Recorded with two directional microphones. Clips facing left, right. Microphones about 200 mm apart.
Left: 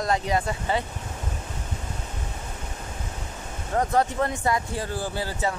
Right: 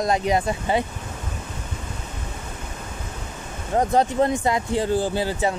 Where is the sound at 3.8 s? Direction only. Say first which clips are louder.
Right 4 dB; 20° right (ahead or behind).